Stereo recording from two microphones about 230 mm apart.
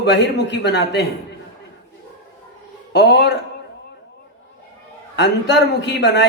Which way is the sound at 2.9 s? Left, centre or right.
Left.